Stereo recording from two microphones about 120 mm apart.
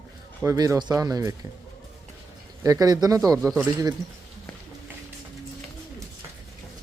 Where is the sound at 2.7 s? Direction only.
30° right (ahead or behind).